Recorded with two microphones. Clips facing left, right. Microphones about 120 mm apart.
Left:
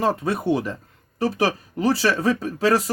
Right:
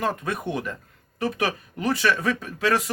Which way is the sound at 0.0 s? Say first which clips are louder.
Left 5 dB; 30° left (ahead or behind).